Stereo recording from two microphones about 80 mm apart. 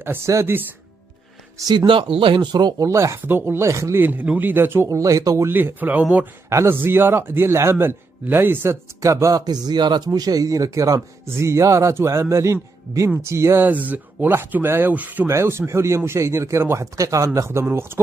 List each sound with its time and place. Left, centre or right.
0.3 s speech: right
1.9 s speech: right
2.8 s speech: right
4.0 s speech: right
4.8 s speech: right
5.5 s speech: right
9.0 s speech: right
9.4 s speech: right
13.7 s speech: centre
15.2 s speech: right